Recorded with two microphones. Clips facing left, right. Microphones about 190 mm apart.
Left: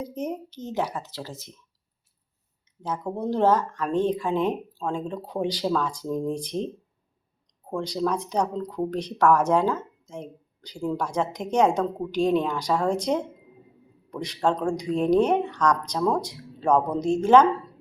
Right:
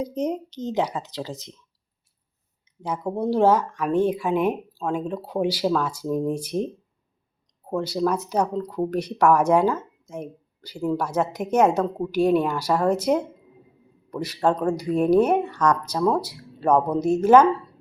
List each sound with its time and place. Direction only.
0.0 s speech: 20° right (ahead or behind)
2.8 s speech: 10° right (ahead or behind)
7.7 s speech: 5° right (ahead or behind)